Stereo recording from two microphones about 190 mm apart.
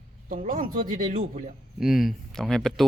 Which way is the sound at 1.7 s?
Centre (ahead or behind).